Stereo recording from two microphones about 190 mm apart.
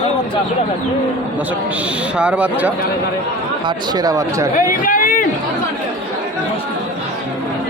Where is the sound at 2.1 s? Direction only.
5° right (ahead or behind).